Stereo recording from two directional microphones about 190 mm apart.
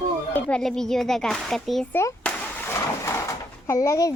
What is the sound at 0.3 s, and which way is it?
A woman's voice, 5° left (ahead or behind).